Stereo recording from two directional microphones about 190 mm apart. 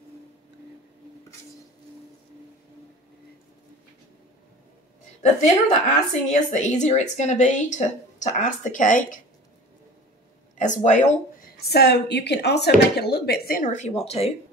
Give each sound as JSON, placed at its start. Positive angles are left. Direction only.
{"t": 5.2, "sound": "a woman's voice", "side_deg": 40}
{"t": 10.6, "sound": "speech", "side_deg": 40}
{"t": 11.6, "sound": "speech", "side_deg": 60}